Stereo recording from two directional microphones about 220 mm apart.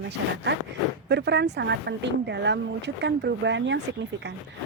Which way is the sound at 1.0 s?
50° right (ahead or behind).